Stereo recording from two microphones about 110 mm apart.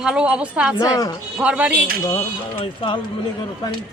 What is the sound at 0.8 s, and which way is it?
Speech, 35° left (ahead or behind).